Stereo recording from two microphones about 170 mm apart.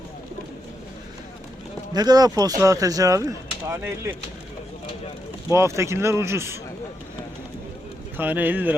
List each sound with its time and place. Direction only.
1.9 s speech: 25° right (ahead or behind)
5.5 s speech: 15° right (ahead or behind)
8.1 s speech: 10° right (ahead or behind)